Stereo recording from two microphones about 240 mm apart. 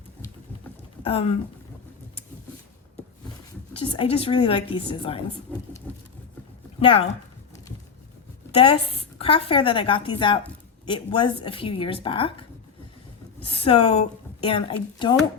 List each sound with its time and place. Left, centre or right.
1.0 s a woman's voice: left
3.8 s a woman's voice: left
5.5 s patter: centre
6.7 s speech: left
8.5 s a woman's voice: left